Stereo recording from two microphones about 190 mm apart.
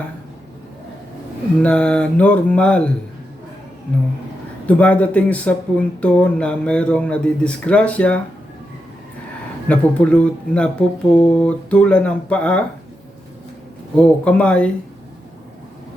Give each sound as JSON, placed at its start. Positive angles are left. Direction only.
{"t": 1.6, "sound": "music", "side_deg": 5}
{"t": 4.6, "sound": "speech", "side_deg": 5}
{"t": 9.6, "sound": "speech", "side_deg": 5}
{"t": 13.9, "sound": "speech", "side_deg": 5}